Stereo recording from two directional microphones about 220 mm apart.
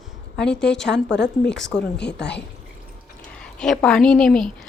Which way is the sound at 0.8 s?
50° left (ahead or behind).